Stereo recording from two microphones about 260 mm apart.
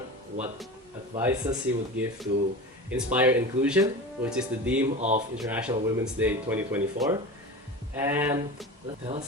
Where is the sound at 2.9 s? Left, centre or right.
Centre.